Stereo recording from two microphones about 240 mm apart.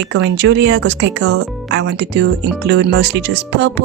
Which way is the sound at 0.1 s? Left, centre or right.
Right.